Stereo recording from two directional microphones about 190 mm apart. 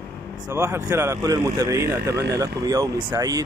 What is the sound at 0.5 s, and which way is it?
Speech, 15° right (ahead or behind).